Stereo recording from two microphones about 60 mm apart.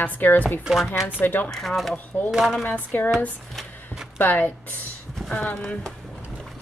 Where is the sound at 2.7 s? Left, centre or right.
Left.